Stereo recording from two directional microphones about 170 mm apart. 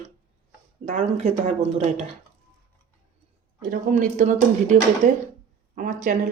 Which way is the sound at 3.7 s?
50° right (ahead or behind).